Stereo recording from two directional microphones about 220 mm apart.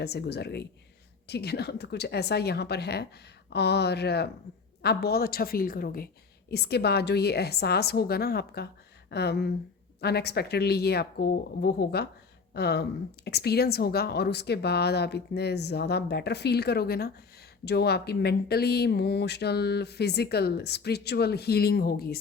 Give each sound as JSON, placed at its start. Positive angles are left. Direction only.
{"t": 0.0, "sound": "speech", "side_deg": 50}